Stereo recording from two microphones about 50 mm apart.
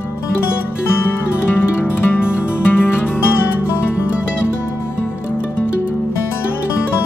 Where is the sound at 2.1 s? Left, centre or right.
Left.